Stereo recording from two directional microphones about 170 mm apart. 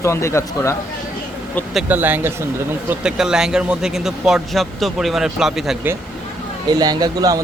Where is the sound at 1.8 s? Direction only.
10° right (ahead or behind).